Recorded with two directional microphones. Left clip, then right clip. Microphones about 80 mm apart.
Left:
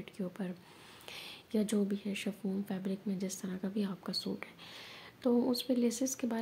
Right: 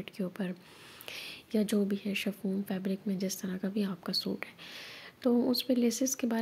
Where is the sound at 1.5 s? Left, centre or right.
Centre.